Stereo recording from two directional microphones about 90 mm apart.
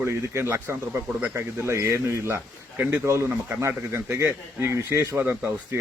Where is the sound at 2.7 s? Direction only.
15° right (ahead or behind).